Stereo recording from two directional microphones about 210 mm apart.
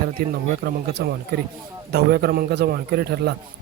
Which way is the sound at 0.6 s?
50° right (ahead or behind).